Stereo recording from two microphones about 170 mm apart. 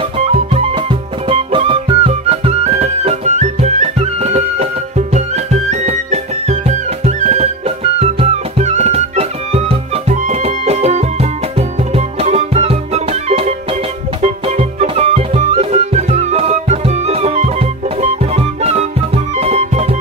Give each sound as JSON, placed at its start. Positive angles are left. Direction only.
{"t": 0.2, "sound": "music", "side_deg": -35}